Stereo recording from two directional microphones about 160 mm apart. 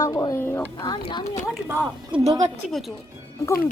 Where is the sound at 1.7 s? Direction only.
15° right (ahead or behind).